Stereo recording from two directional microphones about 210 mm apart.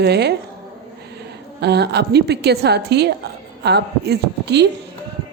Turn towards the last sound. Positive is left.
turn(degrees=-55)  # may be behind; listen again after turning